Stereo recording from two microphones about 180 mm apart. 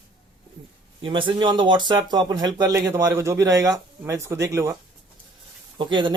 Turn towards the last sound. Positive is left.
turn(degrees=-25)  # may be behind; listen again after turning